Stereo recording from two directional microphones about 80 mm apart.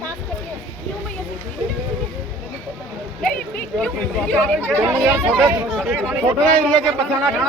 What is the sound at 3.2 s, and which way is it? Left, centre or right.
Speech, centre.